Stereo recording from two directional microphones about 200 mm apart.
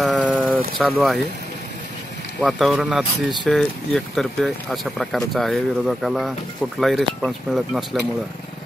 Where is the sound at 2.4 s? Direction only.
Centre (ahead or behind).